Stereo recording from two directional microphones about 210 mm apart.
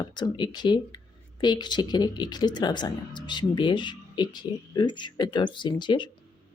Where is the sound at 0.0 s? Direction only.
20° left (ahead or behind).